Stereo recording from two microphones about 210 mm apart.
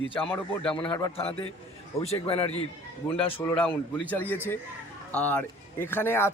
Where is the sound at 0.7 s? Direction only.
25° left (ahead or behind).